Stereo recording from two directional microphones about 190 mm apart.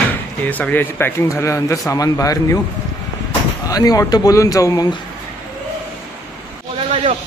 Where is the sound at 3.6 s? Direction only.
20° left (ahead or behind).